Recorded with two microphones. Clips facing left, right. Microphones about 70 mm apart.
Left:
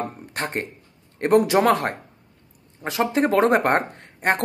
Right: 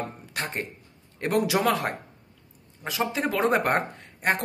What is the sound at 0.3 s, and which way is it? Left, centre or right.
Speech, left.